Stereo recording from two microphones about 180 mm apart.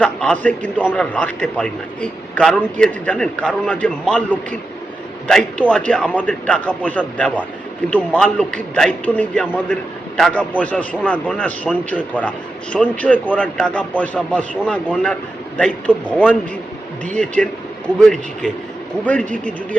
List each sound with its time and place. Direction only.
0.0 s a man's voice: 5° left (ahead or behind)